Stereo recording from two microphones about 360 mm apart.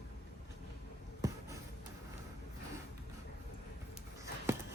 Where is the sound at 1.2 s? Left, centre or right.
Centre.